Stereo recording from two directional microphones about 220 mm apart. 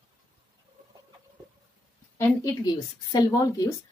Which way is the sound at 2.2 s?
15° left (ahead or behind).